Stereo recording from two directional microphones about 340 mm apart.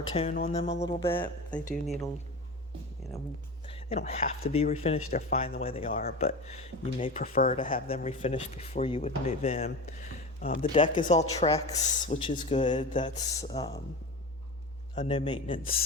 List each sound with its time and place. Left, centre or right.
0.1 s a man's voice: centre
3.7 s a man's voice: centre
14.9 s a man's voice: centre